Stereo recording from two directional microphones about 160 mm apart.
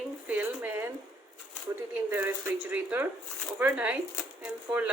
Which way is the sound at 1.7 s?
15° right (ahead or behind).